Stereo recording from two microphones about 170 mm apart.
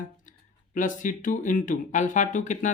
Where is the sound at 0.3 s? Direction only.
50° left (ahead or behind).